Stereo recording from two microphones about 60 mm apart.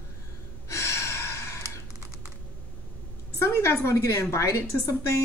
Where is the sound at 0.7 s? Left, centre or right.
Left.